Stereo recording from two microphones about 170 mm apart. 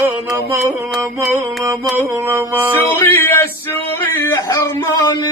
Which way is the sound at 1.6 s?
15° right (ahead or behind).